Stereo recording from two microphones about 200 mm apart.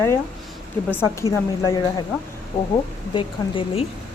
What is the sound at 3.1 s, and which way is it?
Speech, 25° left (ahead or behind).